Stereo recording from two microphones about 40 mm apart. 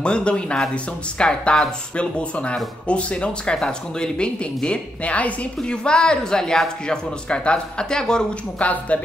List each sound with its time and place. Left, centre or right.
0.0 s speech: left
3.5 s speech: centre
5.0 s a woman's voice: left
5.6 s speech: left
8.5 s a woman's voice: left